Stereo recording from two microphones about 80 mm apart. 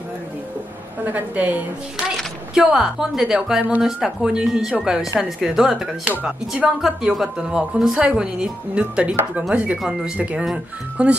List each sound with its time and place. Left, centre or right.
1.0 s a woman's voice: right
2.5 s speech: centre